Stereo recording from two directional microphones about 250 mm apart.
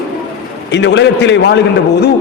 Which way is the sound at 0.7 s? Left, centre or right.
Left.